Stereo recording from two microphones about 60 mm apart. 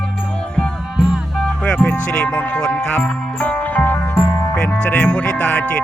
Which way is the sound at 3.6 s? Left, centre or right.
Left.